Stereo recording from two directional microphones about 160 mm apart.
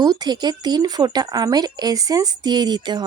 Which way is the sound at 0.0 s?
25° right (ahead or behind).